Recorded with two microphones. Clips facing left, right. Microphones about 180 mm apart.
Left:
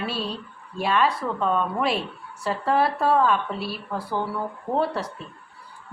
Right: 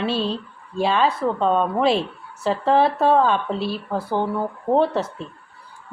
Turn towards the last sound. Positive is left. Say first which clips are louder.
# right 6 dB
turn(degrees=-25)  # may be behind; listen again after turning